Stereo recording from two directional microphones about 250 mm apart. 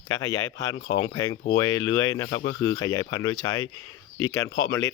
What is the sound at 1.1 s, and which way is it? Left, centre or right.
Speech, centre.